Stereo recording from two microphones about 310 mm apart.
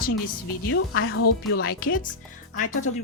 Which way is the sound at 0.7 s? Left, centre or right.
Left.